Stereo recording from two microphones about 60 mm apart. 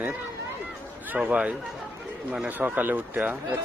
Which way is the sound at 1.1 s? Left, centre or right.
Right.